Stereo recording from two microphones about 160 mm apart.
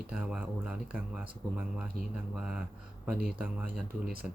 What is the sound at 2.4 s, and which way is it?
Speech, 5° right (ahead or behind).